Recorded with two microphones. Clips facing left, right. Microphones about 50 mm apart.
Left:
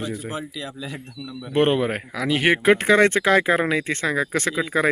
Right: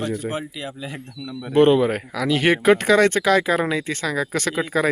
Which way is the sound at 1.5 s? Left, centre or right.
Left.